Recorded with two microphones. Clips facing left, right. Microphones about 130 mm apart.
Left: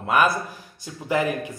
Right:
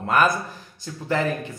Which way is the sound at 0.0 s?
10° left (ahead or behind).